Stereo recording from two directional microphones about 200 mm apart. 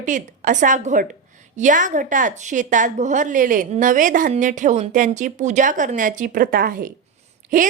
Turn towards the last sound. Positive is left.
turn(degrees=-40)  # may be behind; listen again after turning